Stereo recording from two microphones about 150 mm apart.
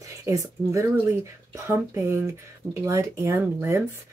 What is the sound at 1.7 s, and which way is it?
Speech, 15° right (ahead or behind).